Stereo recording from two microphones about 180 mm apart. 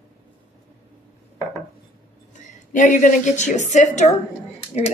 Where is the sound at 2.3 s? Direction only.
45° left (ahead or behind).